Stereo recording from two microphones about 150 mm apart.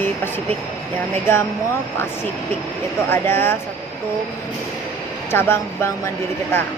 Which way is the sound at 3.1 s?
15° left (ahead or behind).